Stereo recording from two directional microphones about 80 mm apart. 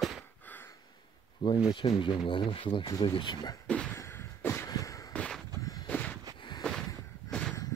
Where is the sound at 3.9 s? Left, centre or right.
Left.